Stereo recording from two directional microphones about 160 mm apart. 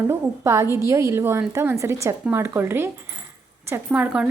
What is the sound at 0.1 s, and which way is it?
A woman's voice, 15° right (ahead or behind).